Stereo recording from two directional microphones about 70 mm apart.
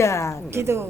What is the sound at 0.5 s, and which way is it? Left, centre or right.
Speech, right.